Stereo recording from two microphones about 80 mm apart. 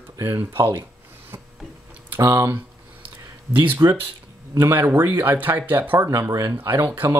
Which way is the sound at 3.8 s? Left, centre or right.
Right.